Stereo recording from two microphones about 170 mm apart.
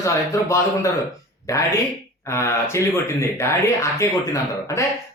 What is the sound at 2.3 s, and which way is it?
A man's voice, 15° left (ahead or behind).